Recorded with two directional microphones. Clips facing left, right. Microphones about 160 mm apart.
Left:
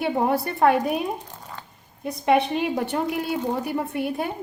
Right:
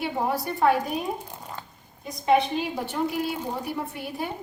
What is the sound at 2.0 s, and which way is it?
Speech, 60° left (ahead or behind).